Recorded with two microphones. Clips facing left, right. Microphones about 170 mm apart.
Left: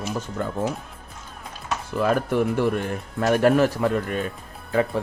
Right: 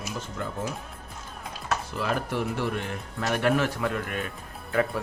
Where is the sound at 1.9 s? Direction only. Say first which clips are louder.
Left 10 dB; 50° left (ahead or behind); by 5.0 s 30° left (ahead or behind).